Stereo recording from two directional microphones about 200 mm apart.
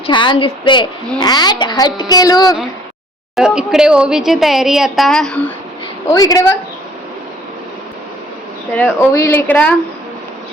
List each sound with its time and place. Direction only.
0.1 s a child's voice: 25° left (ahead or behind)
3.3 s a woman's voice: 5° right (ahead or behind)
6.1 s speech: 15° left (ahead or behind)
8.7 s speech: 10° left (ahead or behind)